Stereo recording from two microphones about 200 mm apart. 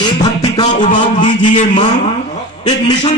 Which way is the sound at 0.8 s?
40° left (ahead or behind).